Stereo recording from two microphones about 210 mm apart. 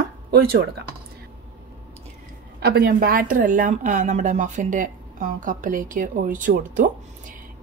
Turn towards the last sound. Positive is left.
turn(degrees=-40)  # may be behind; listen again after turning